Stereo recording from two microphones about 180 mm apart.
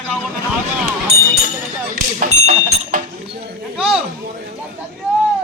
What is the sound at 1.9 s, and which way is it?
Speech, 50° right (ahead or behind).